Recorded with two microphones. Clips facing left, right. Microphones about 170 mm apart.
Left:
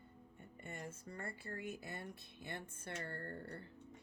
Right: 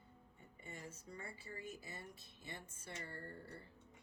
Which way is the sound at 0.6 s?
60° left (ahead or behind).